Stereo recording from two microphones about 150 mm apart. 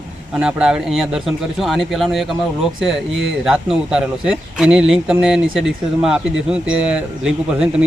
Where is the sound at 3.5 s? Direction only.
5° right (ahead or behind).